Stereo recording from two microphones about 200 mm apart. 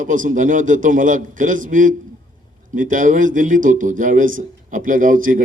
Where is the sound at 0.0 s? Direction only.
40° right (ahead or behind).